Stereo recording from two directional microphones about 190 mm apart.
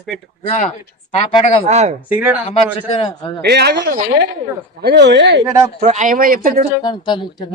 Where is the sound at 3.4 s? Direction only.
60° right (ahead or behind).